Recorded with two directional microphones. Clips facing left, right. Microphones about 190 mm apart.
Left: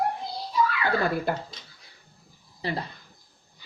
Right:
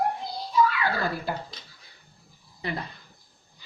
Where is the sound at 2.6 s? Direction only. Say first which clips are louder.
Left 2 dB; 30° left (ahead or behind).